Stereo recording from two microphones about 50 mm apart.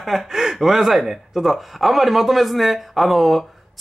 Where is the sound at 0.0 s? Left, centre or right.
Centre.